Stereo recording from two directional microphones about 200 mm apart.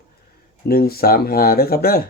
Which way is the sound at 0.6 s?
50° left (ahead or behind).